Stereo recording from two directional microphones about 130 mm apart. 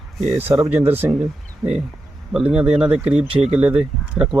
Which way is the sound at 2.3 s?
5° right (ahead or behind).